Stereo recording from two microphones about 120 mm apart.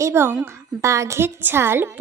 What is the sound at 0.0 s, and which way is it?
A woman's voice, 20° right (ahead or behind).